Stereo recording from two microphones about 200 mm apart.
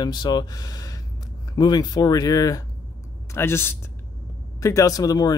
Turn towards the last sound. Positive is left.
turn(degrees=20)  # may be behind; listen again after turning